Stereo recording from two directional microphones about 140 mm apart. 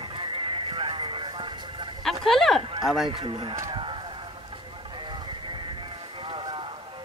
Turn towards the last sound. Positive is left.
turn(degrees=-40)  # may be behind; listen again after turning